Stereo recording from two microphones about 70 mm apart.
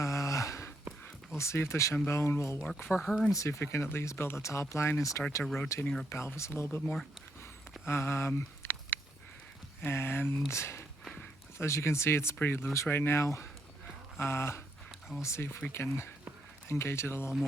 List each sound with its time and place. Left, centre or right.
0.0 s a sound: left
1.4 s speech: left
3.0 s speech: centre
3.3 s speech: left
3.6 s speech: left
5.3 s speech: left
6.8 s speech: centre
7.9 s speech: left
8.4 s a sound: left
9.8 s speech: left